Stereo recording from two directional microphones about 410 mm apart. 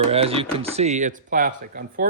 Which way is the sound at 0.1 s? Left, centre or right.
Centre.